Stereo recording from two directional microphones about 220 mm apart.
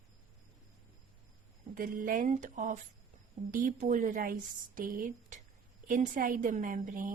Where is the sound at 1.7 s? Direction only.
40° right (ahead or behind).